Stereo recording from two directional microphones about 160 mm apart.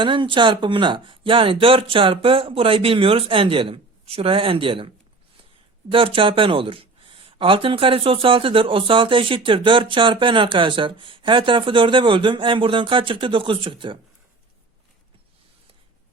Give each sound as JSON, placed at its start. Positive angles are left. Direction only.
{"t": 0.0, "sound": "speech", "side_deg": -30}